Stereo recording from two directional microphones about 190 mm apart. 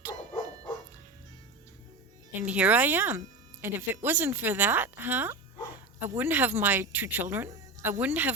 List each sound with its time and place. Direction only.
2.3 s speech: 10° right (ahead or behind)